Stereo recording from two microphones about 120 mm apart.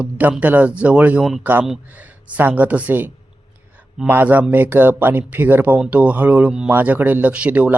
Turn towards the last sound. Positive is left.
turn(degrees=-15)  # may be behind; listen again after turning